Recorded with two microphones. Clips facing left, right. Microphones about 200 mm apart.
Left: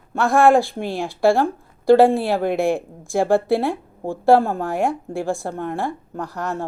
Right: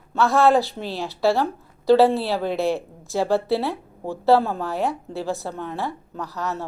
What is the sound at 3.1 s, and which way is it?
Speech, 50° left (ahead or behind).